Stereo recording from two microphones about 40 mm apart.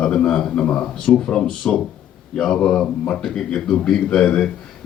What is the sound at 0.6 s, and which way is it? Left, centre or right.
Speech, left.